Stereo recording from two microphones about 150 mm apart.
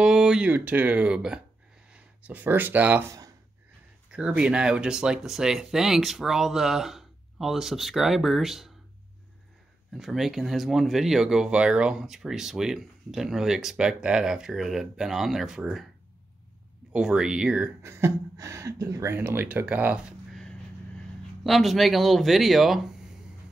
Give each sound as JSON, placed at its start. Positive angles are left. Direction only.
{"t": 0.0, "sound": "speech", "side_deg": -5}
{"t": 9.9, "sound": "speech", "side_deg": 0}
{"t": 16.9, "sound": "speech", "side_deg": -5}
{"t": 17.8, "sound": "speech", "side_deg": -15}
{"t": 21.5, "sound": "speech", "side_deg": 0}